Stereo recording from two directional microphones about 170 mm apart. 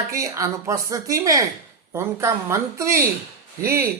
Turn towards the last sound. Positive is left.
turn(degrees=-15)  # may be behind; listen again after turning